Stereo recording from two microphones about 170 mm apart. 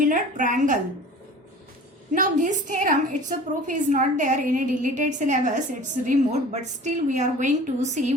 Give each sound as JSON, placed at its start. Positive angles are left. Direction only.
{"t": 0.0, "sound": "a woman's voice", "side_deg": -50}
{"t": 2.1, "sound": "a woman's voice", "side_deg": -50}